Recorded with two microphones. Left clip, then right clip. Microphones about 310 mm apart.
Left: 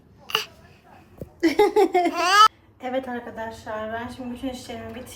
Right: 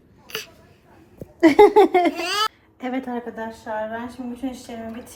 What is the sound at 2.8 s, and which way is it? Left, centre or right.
Speech, right.